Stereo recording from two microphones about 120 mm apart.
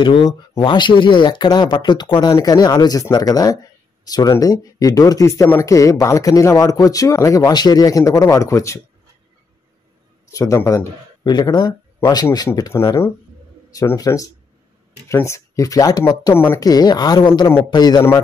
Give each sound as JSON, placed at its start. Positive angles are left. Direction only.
{"t": 0.0, "sound": "speech", "side_deg": 40}
{"t": 10.3, "sound": "speech", "side_deg": 25}
{"t": 11.2, "sound": "speech", "side_deg": 35}
{"t": 12.8, "sound": "speech", "side_deg": 20}
{"t": 13.9, "sound": "speech", "side_deg": 30}